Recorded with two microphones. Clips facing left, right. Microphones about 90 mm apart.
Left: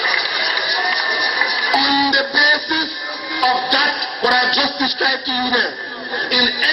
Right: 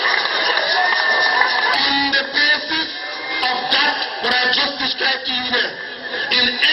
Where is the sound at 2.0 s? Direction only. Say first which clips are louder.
Left 3 dB; 20° left (ahead or behind).